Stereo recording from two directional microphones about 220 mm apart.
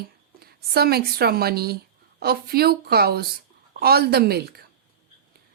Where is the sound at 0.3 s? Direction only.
45° right (ahead or behind).